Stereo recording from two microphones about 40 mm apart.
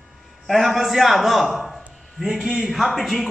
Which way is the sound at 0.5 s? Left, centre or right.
Centre.